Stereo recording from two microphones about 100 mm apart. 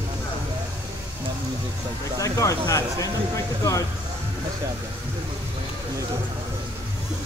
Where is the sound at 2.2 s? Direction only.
35° left (ahead or behind).